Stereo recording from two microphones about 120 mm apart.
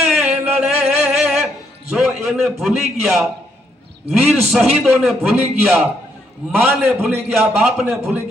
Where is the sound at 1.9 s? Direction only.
Centre (ahead or behind).